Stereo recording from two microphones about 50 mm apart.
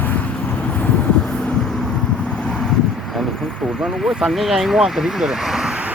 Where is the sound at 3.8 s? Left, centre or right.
Centre.